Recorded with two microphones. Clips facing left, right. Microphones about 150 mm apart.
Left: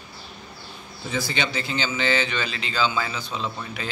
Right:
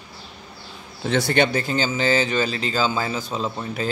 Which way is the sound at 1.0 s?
80° right.